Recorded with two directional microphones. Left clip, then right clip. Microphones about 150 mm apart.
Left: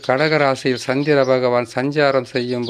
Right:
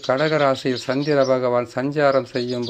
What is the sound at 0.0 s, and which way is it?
Speech, 25° left (ahead or behind).